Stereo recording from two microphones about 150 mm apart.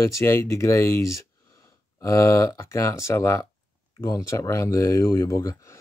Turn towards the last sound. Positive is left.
turn(degrees=20)  # may be behind; listen again after turning